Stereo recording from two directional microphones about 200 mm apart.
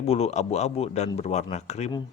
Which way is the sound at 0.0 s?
30° left (ahead or behind).